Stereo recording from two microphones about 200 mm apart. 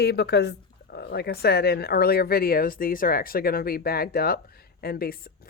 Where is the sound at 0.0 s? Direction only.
55° left (ahead or behind).